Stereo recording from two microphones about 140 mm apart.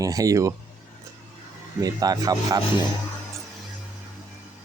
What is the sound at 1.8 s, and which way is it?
Speech, 25° right (ahead or behind).